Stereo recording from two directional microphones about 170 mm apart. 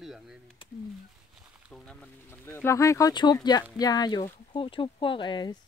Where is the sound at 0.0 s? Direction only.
Centre (ahead or behind).